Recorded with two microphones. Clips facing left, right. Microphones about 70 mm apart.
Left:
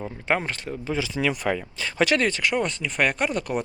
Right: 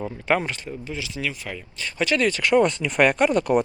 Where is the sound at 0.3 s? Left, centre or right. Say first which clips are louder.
Right 2 dB; left.